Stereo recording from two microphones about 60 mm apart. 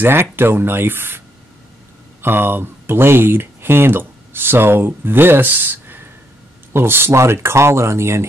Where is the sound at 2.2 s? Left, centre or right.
Right.